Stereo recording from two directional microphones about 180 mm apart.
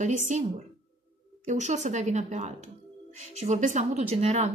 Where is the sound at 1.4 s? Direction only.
40° right (ahead or behind).